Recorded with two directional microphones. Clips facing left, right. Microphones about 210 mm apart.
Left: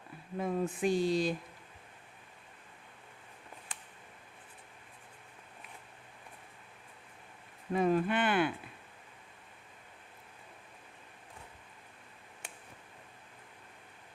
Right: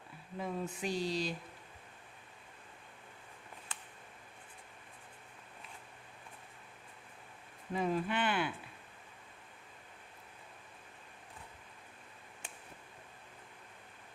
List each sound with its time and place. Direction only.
0.3 s speech: 50° left (ahead or behind)
7.7 s speech: 55° left (ahead or behind)